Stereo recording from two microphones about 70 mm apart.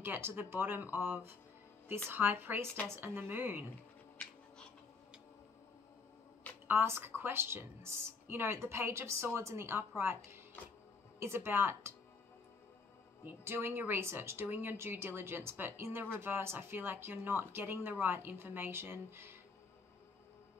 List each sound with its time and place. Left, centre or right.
0.0 s a woman's voice: right
4.2 s a sound: centre
6.7 s a woman's voice: right
13.2 s a woman's voice: right